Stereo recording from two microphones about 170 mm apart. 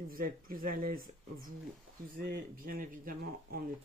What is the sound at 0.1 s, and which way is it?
Speech, 55° right (ahead or behind).